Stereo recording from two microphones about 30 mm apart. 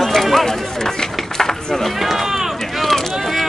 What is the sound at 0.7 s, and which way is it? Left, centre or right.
Run, centre.